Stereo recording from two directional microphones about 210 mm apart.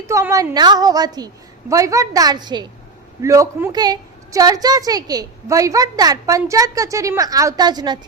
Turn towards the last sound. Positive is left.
turn(degrees=-20)  # may be behind; listen again after turning